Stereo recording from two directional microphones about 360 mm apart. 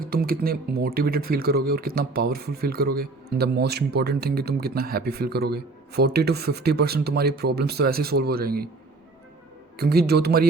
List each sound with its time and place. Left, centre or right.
0.0 s speech: right
9.7 s speech: right